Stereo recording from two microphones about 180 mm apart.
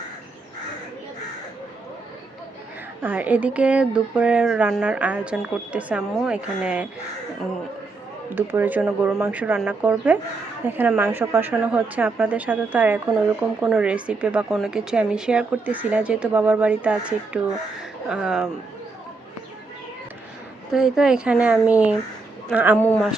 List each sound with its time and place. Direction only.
3.0 s speech: 10° right (ahead or behind)
8.3 s speech: 10° right (ahead or behind)
20.7 s speech: 5° right (ahead or behind)